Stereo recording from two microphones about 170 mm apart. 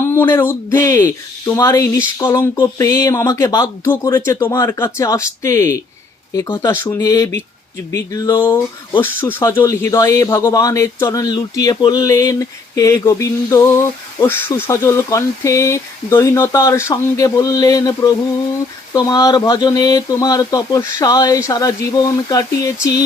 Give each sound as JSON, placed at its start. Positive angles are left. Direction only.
{"t": 0.1, "sound": "speech", "side_deg": 15}